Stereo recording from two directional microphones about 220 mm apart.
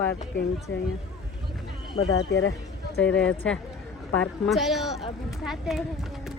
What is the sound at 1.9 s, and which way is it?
Speech, 70° left (ahead or behind).